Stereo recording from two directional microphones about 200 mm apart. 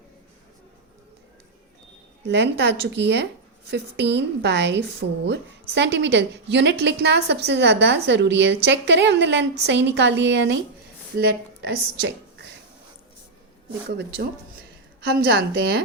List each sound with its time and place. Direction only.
2.2 s speech: 60° right (ahead or behind)
11.6 s speech: 60° right (ahead or behind)
15.0 s speech: 55° right (ahead or behind)